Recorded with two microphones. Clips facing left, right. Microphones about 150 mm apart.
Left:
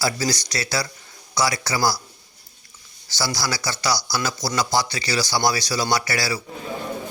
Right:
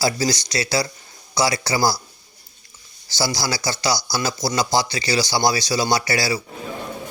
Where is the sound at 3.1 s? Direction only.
25° right (ahead or behind).